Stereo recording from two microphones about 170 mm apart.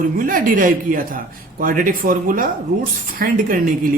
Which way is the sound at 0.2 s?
55° right (ahead or behind).